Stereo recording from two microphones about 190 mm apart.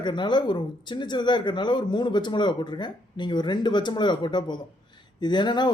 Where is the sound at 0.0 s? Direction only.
25° left (ahead or behind).